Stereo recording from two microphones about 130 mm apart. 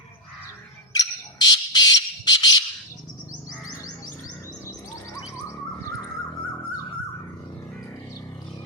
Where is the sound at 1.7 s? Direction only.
30° left (ahead or behind).